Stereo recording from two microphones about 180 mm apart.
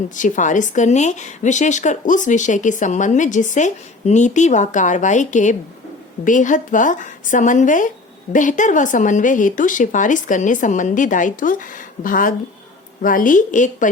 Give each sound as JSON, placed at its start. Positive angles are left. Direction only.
{"t": 0.2, "sound": "a woman's voice", "side_deg": 45}